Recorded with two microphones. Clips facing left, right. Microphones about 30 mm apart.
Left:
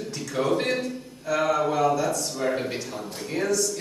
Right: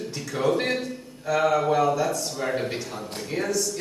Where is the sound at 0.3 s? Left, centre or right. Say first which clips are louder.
Right 1 dB; centre.